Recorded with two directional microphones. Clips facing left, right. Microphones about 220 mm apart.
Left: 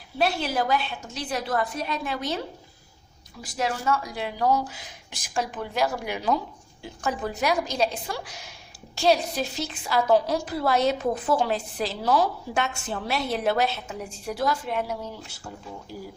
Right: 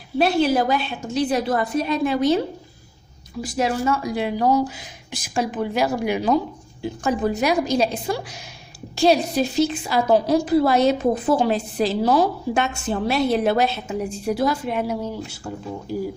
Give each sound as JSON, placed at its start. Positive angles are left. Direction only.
{"t": 0.2, "sound": "a woman's voice", "side_deg": -20}
{"t": 3.6, "sound": "a woman's voice", "side_deg": -15}